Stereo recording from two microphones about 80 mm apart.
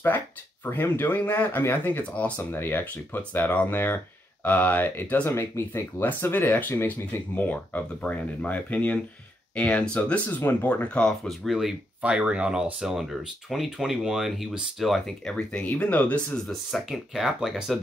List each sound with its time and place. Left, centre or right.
0.7 s speech: left
5.3 s speech: left; by 11.1 s centre
11.2 s speech: centre
16.4 s speech: centre